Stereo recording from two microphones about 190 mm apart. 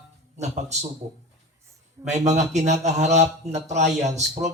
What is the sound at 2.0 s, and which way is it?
A man's voice, 35° right (ahead or behind).